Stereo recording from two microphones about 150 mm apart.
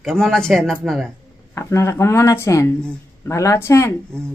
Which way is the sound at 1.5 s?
20° left (ahead or behind).